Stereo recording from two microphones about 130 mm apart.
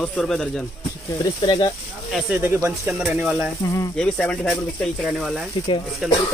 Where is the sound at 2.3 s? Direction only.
20° right (ahead or behind).